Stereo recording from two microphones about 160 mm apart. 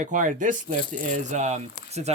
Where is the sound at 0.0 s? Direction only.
50° right (ahead or behind).